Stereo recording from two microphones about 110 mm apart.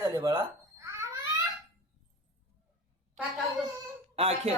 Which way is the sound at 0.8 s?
25° right (ahead or behind).